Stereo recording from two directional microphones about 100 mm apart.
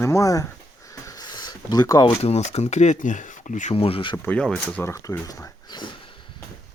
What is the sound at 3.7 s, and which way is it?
Speech, 70° left (ahead or behind).